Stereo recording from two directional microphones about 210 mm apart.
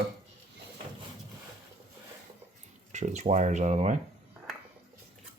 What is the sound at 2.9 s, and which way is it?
Speech, 35° right (ahead or behind).